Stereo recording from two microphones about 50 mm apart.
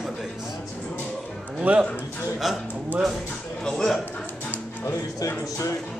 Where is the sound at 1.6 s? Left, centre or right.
Right.